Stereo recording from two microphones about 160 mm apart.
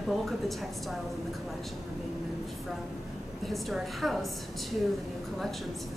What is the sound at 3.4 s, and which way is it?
Speech, centre (ahead or behind).